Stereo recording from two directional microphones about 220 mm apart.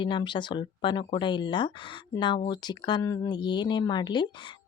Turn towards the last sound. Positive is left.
turn(degrees=20)  # may be behind; listen again after turning